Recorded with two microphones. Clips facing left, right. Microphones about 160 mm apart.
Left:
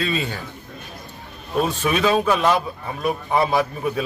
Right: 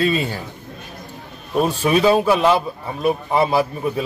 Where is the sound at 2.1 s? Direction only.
10° right (ahead or behind).